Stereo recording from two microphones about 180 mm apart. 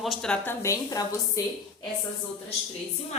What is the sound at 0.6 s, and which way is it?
Speech, 20° left (ahead or behind).